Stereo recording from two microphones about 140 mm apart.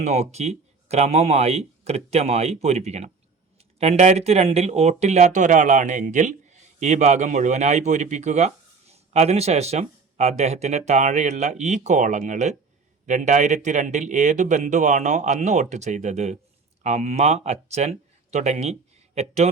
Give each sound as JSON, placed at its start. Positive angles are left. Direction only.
{"t": 0.0, "sound": "speech", "side_deg": -50}